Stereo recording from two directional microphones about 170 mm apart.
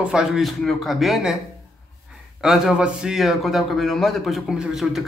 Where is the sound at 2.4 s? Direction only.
5° right (ahead or behind).